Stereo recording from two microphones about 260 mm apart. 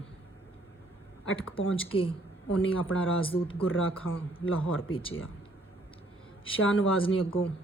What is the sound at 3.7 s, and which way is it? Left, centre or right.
Speech, left.